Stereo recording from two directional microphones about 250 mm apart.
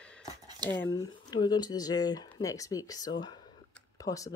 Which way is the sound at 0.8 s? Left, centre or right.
Centre.